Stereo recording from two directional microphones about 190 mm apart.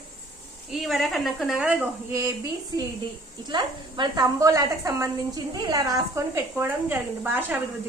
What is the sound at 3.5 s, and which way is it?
A woman's voice, 20° right (ahead or behind).